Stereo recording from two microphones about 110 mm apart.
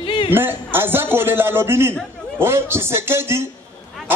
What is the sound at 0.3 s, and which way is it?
A man's voice, 20° right (ahead or behind).